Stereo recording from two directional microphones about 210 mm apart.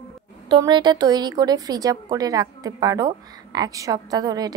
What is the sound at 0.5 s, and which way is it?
A woman's voice, 20° right (ahead or behind).